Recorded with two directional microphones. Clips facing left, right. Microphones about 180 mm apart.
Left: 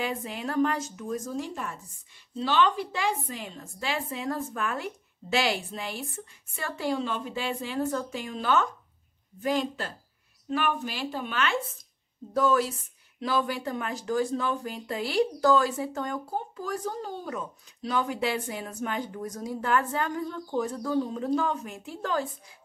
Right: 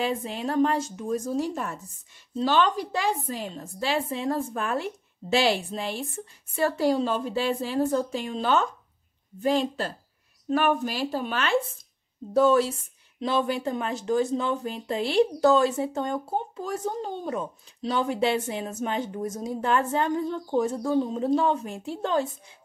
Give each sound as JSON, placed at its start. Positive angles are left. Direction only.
{"t": 0.0, "sound": "a woman's voice", "side_deg": -30}
{"t": 10.5, "sound": "a woman's voice", "side_deg": -40}